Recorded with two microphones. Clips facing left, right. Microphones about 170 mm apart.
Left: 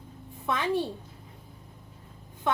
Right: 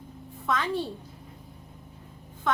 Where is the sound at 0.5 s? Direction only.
15° left (ahead or behind).